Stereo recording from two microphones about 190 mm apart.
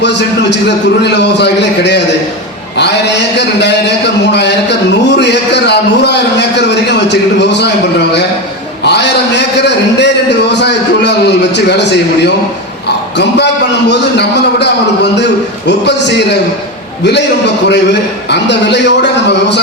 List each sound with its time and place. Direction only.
0.0 s a man's voice: 65° left (ahead or behind)
3.3 s a man's voice: 65° left (ahead or behind)
8.8 s a man's voice: 65° left (ahead or behind)
13.9 s a man's voice: 65° left (ahead or behind)
18.3 s a man's voice: 65° left (ahead or behind)